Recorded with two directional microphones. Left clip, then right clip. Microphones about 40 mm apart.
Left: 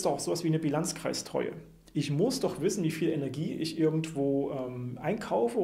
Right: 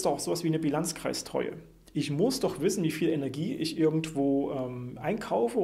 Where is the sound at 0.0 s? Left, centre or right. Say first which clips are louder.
Right 1 dB; right.